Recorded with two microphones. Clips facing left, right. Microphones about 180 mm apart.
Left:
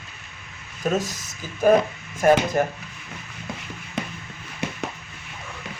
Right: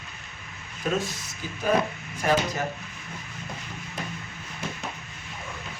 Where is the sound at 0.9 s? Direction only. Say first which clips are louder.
Left 3 dB; 40° left (ahead or behind).